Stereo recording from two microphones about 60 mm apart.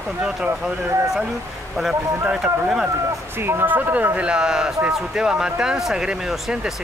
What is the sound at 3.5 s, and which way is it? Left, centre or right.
Speech, right.